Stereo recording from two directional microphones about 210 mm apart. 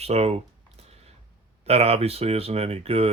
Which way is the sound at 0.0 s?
30° right (ahead or behind).